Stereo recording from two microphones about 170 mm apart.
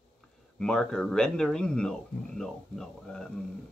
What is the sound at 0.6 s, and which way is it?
Speech, 5° left (ahead or behind).